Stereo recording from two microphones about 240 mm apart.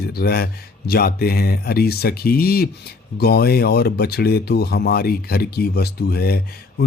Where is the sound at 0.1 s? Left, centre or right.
Left.